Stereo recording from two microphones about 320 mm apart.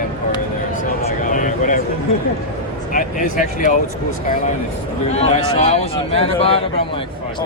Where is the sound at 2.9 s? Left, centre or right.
Left.